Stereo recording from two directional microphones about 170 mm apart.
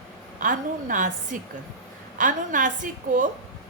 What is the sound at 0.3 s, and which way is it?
A woman's voice, 50° right (ahead or behind).